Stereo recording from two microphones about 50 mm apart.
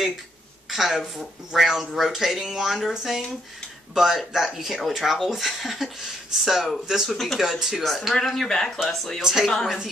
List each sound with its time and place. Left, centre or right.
0.7 s a woman's voice: centre
7.4 s speech: centre
9.2 s speech: centre